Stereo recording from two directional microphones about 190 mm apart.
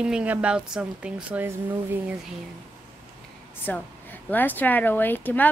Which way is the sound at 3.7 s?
10° left (ahead or behind).